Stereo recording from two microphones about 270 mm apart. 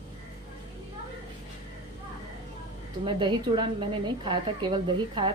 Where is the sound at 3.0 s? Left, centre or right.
Centre.